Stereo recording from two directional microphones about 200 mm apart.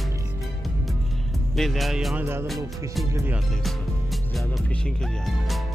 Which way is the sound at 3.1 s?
10° right (ahead or behind).